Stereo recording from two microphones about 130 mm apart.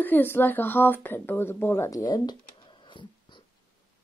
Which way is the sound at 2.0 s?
35° left (ahead or behind).